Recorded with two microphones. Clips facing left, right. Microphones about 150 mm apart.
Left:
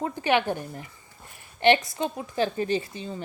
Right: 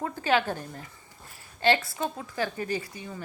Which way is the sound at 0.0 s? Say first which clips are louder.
Left 2 dB; 20° left (ahead or behind).